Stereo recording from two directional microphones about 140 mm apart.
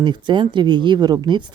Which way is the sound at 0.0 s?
35° right (ahead or behind).